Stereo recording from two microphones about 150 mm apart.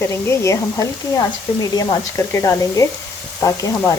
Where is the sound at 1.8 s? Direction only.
25° left (ahead or behind).